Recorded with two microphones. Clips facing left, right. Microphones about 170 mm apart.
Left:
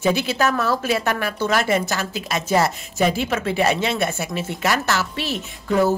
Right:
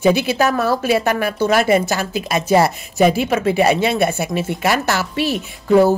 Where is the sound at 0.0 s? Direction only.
10° right (ahead or behind).